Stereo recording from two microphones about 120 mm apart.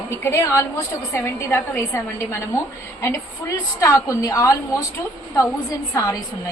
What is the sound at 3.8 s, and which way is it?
Speech, 25° left (ahead or behind).